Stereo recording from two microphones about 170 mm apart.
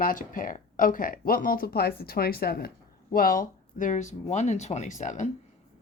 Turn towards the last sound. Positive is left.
turn(degrees=45)  # may be behind; listen again after turning